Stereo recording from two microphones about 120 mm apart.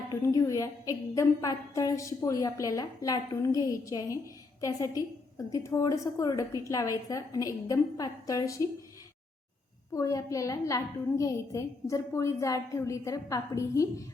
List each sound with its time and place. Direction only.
0.2 s a woman's voice: 25° left (ahead or behind)
9.9 s a woman's voice: 25° left (ahead or behind)